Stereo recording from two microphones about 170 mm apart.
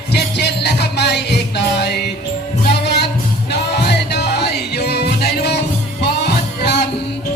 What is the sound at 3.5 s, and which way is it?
Music, 75° left (ahead or behind).